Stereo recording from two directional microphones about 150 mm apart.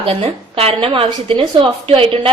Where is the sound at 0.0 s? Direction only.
40° right (ahead or behind).